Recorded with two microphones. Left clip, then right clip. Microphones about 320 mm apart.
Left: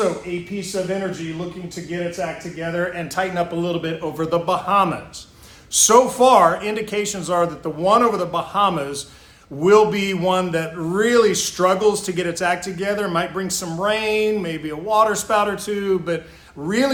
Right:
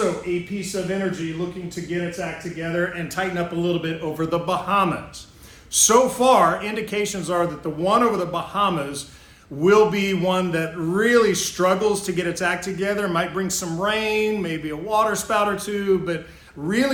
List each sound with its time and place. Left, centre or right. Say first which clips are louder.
2.6 s a man's voice: left 1 dB; centre